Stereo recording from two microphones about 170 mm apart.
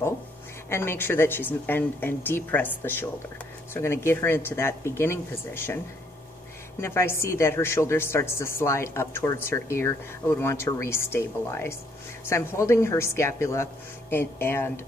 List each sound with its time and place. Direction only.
0.7 s a woman's voice: 15° left (ahead or behind)
6.8 s a woman's voice: 15° left (ahead or behind)